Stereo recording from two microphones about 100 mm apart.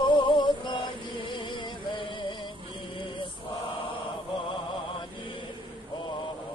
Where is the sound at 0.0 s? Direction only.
55° left (ahead or behind).